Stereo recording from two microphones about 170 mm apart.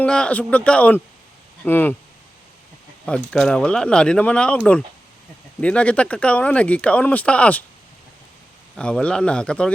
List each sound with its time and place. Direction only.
0.0 s speech: 5° left (ahead or behind)
3.3 s speech: 5° left (ahead or behind)
8.7 s speech: 5° left (ahead or behind)